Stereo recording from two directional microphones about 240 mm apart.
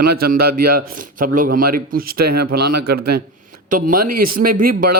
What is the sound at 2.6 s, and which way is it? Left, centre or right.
Speech, right.